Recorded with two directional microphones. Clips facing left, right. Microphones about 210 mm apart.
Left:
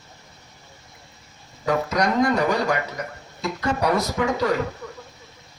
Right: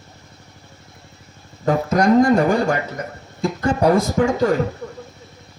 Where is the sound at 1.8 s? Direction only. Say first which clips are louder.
Right 9 dB; 50° right (ahead or behind).